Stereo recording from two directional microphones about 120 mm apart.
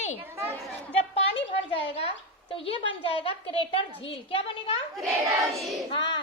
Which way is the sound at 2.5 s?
50° left (ahead or behind).